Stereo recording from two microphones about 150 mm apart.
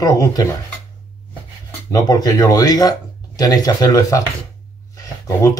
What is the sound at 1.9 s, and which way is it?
Speech, 25° left (ahead or behind).